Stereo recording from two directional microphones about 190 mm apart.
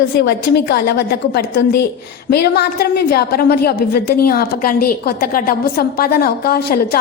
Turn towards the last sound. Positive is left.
turn(degrees=50)  # may be behind; listen again after turning